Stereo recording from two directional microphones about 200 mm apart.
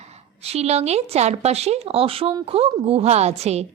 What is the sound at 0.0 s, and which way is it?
A woman's voice, 30° right (ahead or behind).